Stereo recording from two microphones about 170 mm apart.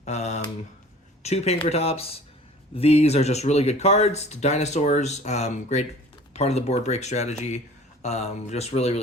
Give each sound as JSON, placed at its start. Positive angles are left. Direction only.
{"t": 0.0, "sound": "speech", "side_deg": 40}